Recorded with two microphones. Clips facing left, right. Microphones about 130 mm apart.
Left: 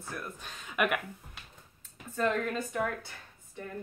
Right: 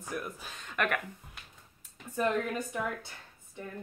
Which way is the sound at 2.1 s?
15° right (ahead or behind).